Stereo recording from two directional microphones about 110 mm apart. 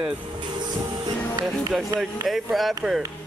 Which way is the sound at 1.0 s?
35° right (ahead or behind).